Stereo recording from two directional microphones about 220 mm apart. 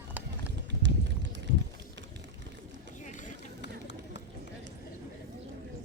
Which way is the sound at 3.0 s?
35° left (ahead or behind).